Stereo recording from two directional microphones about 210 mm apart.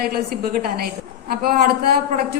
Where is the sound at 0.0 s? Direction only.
45° right (ahead or behind).